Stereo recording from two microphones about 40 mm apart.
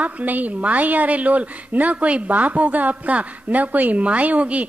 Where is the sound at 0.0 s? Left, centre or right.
Right.